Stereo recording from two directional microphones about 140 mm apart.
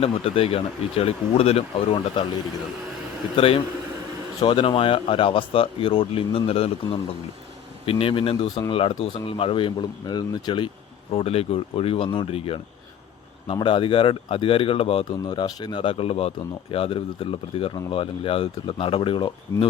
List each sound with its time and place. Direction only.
0.0 s speech: 45° left (ahead or behind)
3.3 s speech: 40° left (ahead or behind)
11.1 s speech: 45° left (ahead or behind)
15.3 s speech: 30° left (ahead or behind)